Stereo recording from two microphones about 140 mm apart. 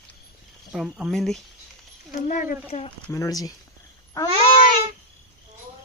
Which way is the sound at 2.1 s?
70° left (ahead or behind).